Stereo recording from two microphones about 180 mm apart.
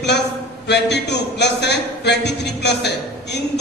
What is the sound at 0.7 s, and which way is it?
Speech, 70° left (ahead or behind).